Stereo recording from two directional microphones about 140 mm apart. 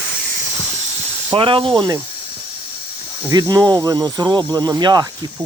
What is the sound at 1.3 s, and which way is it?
Speech, 40° right (ahead or behind).